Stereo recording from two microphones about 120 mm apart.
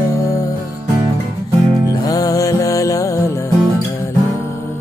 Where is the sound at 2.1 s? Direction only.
30° left (ahead or behind).